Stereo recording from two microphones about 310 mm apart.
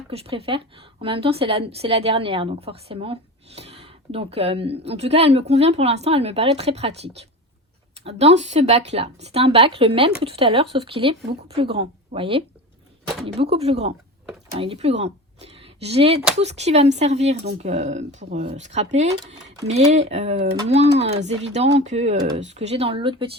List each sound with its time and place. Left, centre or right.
0.1 s a woman's voice: centre